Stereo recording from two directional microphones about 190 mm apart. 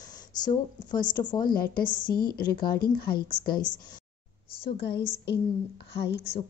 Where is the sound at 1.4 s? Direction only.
50° left (ahead or behind).